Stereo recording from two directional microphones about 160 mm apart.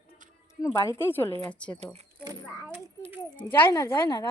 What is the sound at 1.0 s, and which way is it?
Speech, 15° left (ahead or behind).